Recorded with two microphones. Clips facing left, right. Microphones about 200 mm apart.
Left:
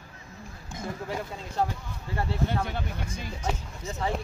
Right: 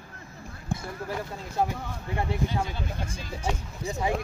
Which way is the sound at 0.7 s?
55° right (ahead or behind).